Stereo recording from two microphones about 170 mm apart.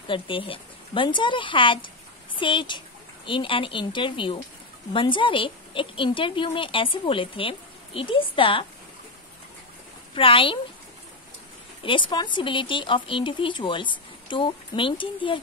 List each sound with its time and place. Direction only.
0.1 s speech: 30° left (ahead or behind)
10.1 s speech: 30° left (ahead or behind)
11.8 s speech: 30° left (ahead or behind)